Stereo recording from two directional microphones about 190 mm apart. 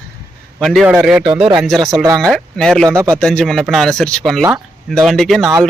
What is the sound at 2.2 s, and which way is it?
Speech, 5° left (ahead or behind).